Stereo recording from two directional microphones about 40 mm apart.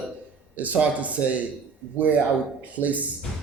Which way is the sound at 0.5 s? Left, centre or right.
Right.